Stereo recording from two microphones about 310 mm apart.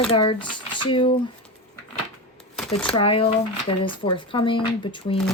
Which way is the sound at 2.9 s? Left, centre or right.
Centre.